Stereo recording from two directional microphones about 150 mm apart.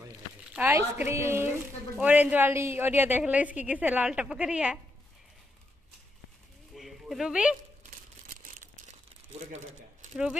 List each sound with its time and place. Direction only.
0.5 s a woman's voice: 10° right (ahead or behind)
6.7 s a sound: centre (ahead or behind)
8.5 s crumpling: 60° right (ahead or behind)